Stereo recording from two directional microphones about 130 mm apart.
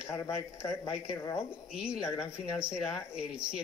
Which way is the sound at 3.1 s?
5° right (ahead or behind).